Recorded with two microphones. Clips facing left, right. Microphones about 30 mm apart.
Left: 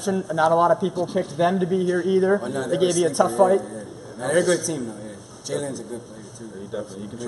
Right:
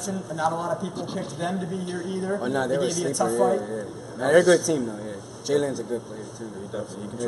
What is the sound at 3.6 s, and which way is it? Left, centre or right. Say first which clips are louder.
A man's voice: right 2 dB; centre.